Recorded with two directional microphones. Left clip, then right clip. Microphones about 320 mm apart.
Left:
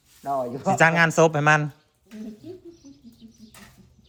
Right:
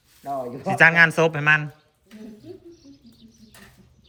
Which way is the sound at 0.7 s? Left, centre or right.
Centre.